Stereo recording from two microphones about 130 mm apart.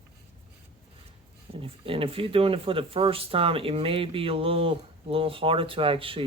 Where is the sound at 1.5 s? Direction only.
45° right (ahead or behind).